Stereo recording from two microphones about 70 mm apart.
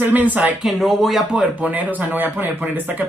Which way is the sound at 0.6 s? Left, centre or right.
Centre.